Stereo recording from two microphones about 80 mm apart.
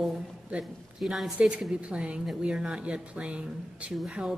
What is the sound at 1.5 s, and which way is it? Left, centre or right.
A woman's voice, centre.